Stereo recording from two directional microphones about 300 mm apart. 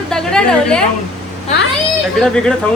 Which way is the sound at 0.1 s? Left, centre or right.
Centre.